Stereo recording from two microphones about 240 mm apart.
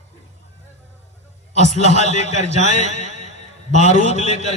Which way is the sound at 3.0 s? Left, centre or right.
Left.